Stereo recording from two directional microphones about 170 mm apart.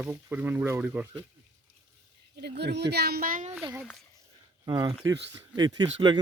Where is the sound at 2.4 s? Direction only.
75° right (ahead or behind); by 3.6 s 50° right (ahead or behind).